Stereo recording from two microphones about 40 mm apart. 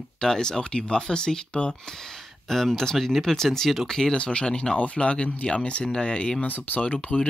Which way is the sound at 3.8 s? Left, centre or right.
Centre.